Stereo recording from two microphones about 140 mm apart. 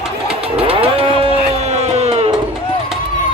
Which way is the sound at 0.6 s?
40° right (ahead or behind).